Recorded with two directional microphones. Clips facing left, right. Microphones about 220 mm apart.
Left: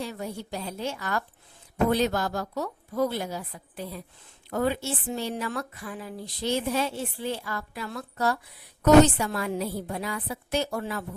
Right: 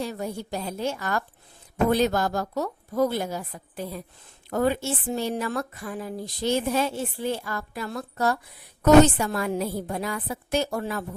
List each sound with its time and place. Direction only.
0.0 s speech: 45° right (ahead or behind)